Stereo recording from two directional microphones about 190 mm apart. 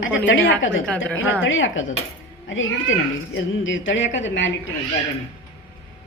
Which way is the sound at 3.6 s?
80° left.